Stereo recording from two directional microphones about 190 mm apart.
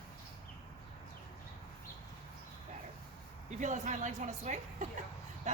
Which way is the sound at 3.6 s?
40° right (ahead or behind).